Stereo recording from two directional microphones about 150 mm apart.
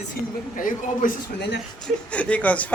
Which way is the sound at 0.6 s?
65° left (ahead or behind).